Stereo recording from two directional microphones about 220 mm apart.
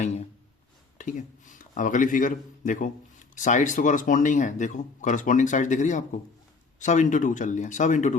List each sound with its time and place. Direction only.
0.9 s a man's voice: 35° left (ahead or behind)